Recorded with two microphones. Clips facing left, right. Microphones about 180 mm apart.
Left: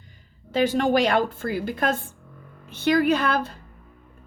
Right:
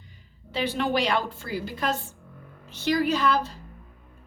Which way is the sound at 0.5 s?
45° left (ahead or behind).